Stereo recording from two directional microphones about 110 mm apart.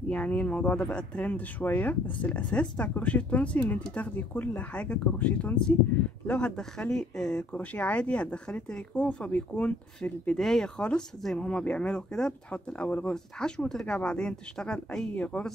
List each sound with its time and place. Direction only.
0.1 s speech: 10° left (ahead or behind)